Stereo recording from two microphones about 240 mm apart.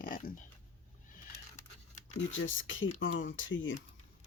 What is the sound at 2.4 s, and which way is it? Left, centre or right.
Speech, left.